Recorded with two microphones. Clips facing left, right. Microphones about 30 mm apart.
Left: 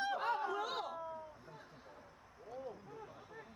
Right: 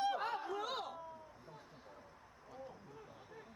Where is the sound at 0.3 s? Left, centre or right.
Centre.